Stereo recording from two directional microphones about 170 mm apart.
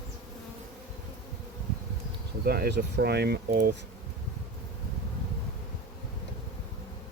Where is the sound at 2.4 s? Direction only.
65° right (ahead or behind).